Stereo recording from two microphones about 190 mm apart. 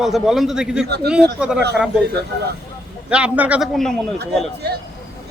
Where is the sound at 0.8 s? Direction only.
60° right (ahead or behind).